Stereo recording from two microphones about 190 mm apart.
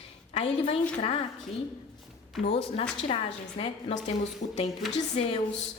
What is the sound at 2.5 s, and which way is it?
A woman's voice, 30° left (ahead or behind).